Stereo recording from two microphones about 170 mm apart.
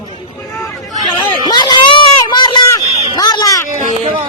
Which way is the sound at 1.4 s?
25° left (ahead or behind).